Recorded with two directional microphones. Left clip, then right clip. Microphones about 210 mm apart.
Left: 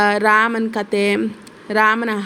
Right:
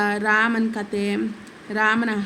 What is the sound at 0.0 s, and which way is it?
Speech, 30° left (ahead or behind).